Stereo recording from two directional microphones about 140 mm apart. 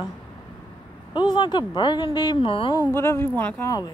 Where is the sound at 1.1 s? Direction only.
35° left (ahead or behind).